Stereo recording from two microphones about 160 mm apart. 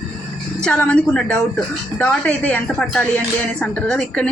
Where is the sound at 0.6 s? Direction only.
5° left (ahead or behind).